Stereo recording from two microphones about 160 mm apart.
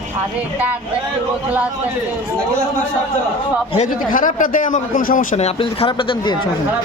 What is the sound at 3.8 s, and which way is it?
A man's voice, 55° left (ahead or behind).